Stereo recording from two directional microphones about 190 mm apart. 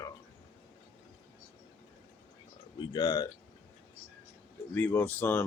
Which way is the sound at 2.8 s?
20° left (ahead or behind).